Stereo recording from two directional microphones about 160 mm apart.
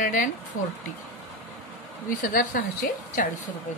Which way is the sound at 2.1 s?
60° left (ahead or behind).